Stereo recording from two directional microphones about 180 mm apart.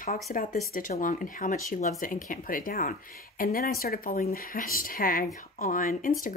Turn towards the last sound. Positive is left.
turn(degrees=50)  # may be behind; listen again after turning